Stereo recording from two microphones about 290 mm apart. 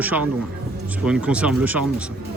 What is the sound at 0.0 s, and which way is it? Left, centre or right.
Speech, centre.